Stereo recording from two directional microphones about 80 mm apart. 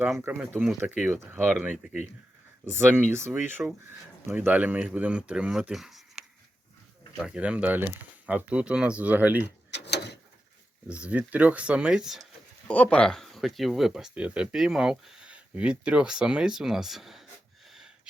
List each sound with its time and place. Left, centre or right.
0.3 s speech: centre
2.6 s speech: right; by 6.2 s centre
7.3 s speech: centre
11.0 s speech: centre
12.6 s speech: centre
17.7 s a sound: centre